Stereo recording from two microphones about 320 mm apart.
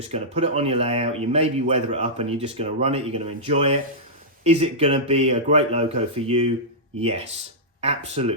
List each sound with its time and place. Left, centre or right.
0.1 s speech: centre